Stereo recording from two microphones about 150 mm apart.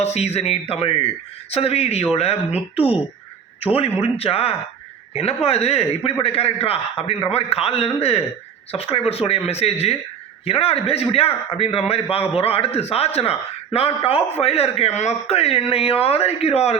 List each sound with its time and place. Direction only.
0.0 s a man's voice: 45° left (ahead or behind)